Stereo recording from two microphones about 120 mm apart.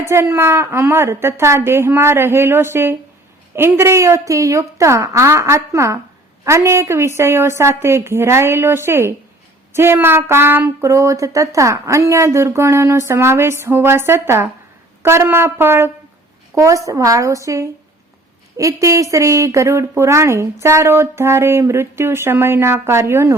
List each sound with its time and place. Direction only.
0.0 s a woman's voice: 20° right (ahead or behind)